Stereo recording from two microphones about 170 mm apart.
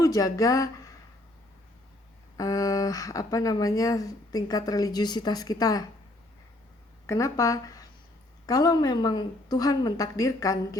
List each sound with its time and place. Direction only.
0.0 s speech: 20° left (ahead or behind)
2.4 s speech: 20° left (ahead or behind)
7.1 s speech: 20° left (ahead or behind)